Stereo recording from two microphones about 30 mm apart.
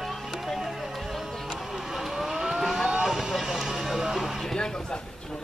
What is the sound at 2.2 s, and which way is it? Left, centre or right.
Vehicle, centre.